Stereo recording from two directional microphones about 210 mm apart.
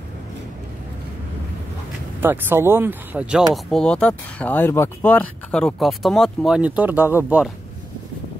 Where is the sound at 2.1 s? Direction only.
10° right (ahead or behind).